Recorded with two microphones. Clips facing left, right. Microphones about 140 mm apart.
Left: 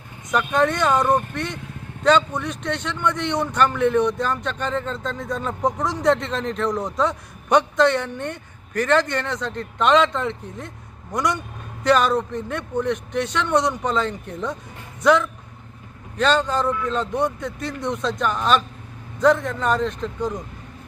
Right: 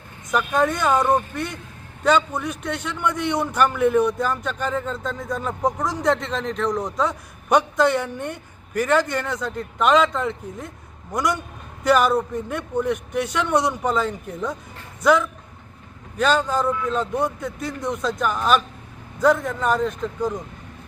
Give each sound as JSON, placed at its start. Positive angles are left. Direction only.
{"t": 0.3, "sound": "a man's voice", "side_deg": -5}